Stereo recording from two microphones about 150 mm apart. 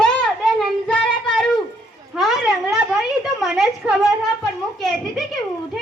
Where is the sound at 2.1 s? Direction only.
Centre (ahead or behind).